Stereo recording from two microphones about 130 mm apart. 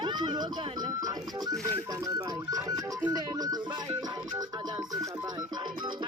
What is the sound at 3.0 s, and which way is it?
Music, 30° right (ahead or behind).